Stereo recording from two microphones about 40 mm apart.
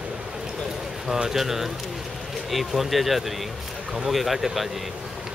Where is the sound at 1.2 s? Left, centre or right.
Centre.